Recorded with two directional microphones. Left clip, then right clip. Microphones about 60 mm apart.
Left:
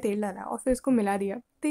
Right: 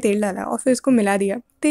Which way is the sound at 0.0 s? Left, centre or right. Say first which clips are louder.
Right 9 dB; right.